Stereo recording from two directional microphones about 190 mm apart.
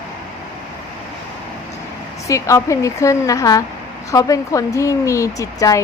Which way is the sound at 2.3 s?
15° left (ahead or behind).